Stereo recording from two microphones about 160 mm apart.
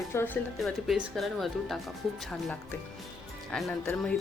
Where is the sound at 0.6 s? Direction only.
Centre (ahead or behind).